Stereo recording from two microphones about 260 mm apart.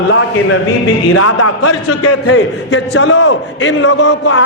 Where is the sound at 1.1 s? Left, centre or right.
Left.